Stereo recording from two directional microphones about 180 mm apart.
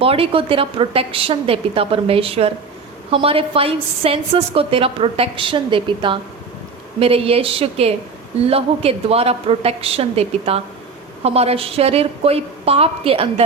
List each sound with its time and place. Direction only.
0.0 s a woman's voice: 30° right (ahead or behind)